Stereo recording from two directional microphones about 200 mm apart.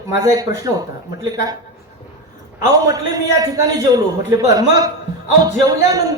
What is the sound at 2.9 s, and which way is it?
A man's voice, 15° right (ahead or behind).